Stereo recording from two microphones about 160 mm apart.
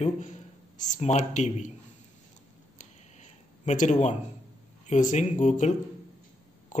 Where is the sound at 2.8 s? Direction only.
50° left (ahead or behind).